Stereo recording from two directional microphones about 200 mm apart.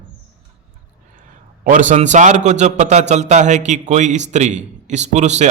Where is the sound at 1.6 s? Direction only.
40° right (ahead or behind).